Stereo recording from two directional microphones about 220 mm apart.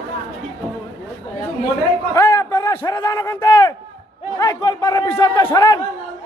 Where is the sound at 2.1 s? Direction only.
15° left (ahead or behind).